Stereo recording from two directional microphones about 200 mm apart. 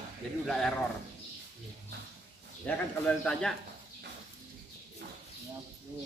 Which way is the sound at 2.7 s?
5° left (ahead or behind).